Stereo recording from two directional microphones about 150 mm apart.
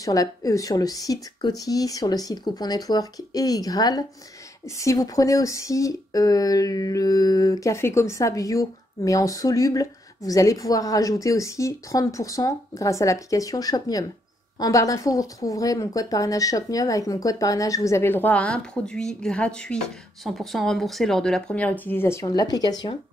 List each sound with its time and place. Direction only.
0.0 s speech: 25° left (ahead or behind)